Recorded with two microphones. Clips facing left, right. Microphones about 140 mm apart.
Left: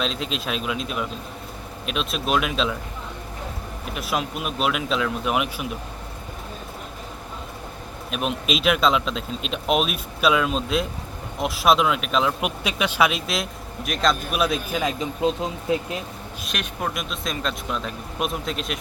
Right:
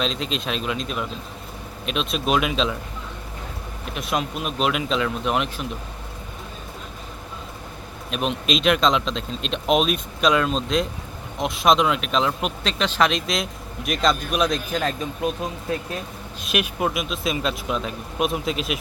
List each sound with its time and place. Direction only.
0.0 s speech: centre (ahead or behind)
3.9 s speech: centre (ahead or behind)
8.1 s speech: 5° left (ahead or behind)
15.2 s speech: 25° left (ahead or behind)
16.4 s speech: 5° right (ahead or behind)